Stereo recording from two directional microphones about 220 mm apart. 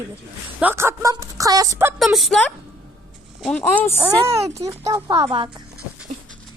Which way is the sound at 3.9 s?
10° right (ahead or behind).